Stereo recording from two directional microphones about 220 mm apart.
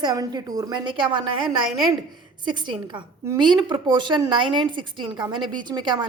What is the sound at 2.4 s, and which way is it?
A woman's voice, 20° right (ahead or behind).